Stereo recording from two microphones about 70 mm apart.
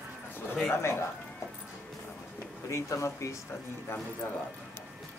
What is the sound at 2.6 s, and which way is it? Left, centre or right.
Speech, left.